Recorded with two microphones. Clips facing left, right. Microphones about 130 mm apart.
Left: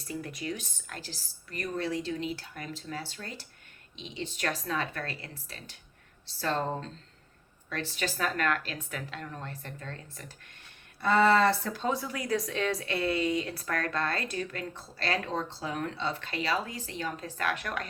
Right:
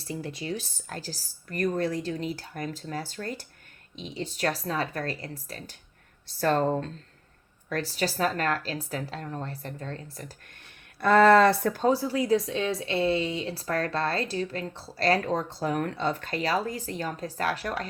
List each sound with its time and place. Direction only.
0.0 s speech: 30° right (ahead or behind); by 6.8 s 50° right (ahead or behind)
7.7 s speech: 40° right (ahead or behind)
11.0 s speech: 65° right (ahead or behind)
11.9 s speech: 35° right (ahead or behind)